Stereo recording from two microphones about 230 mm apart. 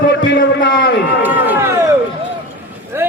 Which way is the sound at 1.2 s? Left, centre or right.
Centre.